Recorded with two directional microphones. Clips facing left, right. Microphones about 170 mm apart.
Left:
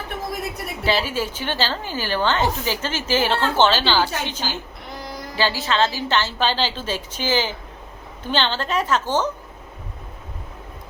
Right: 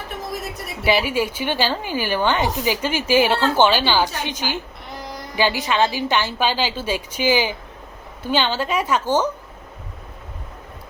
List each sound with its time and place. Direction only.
0.9 s a woman's voice: 15° right (ahead or behind)